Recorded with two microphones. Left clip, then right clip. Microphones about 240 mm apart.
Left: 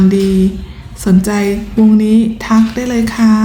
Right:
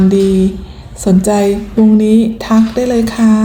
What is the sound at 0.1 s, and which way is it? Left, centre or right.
Speech, centre.